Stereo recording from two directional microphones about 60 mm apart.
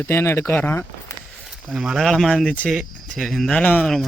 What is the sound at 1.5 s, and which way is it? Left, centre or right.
Speech, centre.